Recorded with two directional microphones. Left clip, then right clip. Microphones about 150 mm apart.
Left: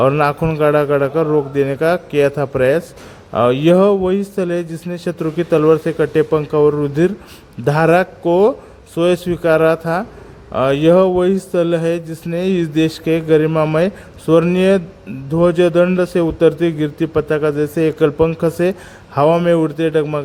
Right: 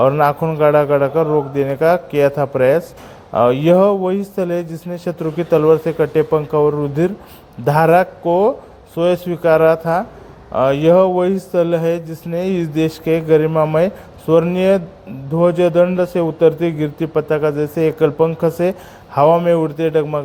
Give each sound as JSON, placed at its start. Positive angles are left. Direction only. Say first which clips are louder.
{"t": 0.0, "sound": "a man's voice", "louder": "right 1 dB", "side_deg": 25}